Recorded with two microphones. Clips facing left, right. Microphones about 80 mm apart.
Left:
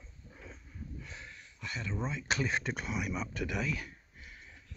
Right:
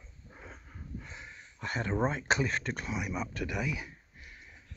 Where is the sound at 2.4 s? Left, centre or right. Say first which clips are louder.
Even; centre.